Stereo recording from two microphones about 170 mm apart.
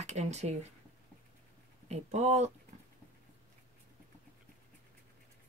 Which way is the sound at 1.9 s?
40° right (ahead or behind).